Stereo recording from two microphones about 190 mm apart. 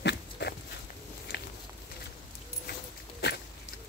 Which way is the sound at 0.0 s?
60° left (ahead or behind).